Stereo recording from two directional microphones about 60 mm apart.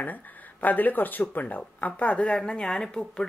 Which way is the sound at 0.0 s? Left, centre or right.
Left.